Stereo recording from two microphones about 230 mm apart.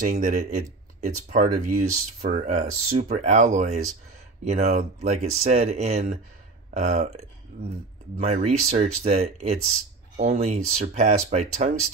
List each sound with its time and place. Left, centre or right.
0.0 s speech: right
8.2 s speech: right